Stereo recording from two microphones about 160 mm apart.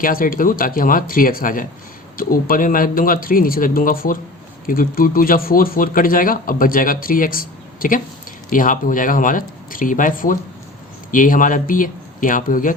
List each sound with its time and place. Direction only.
0.0 s speech: 60° left (ahead or behind)